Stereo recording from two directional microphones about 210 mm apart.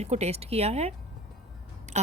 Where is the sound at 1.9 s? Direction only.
35° right (ahead or behind).